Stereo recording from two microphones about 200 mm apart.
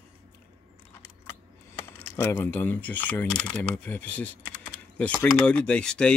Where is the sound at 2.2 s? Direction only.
10° left (ahead or behind).